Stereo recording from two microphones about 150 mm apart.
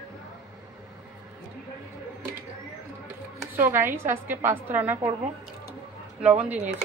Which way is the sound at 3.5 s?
15° right (ahead or behind).